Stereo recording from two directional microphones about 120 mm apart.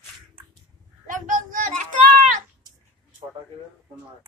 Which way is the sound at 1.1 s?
90° right.